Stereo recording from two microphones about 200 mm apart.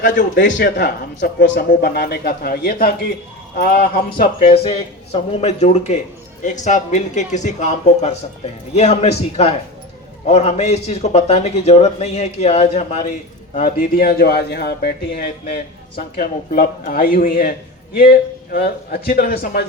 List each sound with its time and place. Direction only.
0.0 s a man's voice: 40° left (ahead or behind)
0.3 s a man's voice: 60° left (ahead or behind)
4.4 s a man's voice: 30° left (ahead or behind)
18.5 s a man's voice: 50° left (ahead or behind)